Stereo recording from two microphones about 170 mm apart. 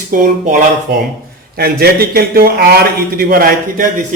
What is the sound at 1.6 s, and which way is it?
A man's voice, 65° right (ahead or behind).